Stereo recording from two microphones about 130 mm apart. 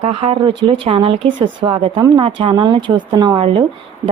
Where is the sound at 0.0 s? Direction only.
50° right (ahead or behind).